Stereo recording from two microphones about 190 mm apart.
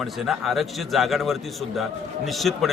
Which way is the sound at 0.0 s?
Centre (ahead or behind).